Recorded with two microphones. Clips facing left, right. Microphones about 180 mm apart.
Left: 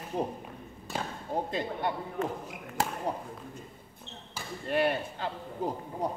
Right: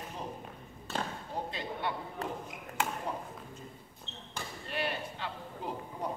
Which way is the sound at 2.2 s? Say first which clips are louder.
Left 7 dB; 35° right (ahead or behind).